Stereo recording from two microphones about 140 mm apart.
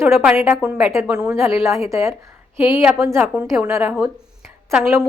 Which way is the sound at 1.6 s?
20° right (ahead or behind).